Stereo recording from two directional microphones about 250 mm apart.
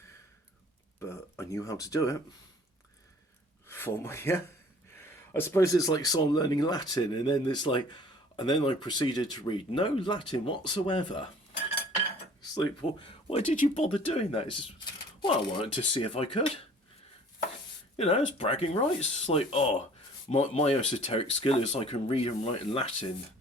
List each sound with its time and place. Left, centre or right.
0.9 s speech: centre
3.7 s speech: centre
12.4 s speech: centre
17.9 s speech: left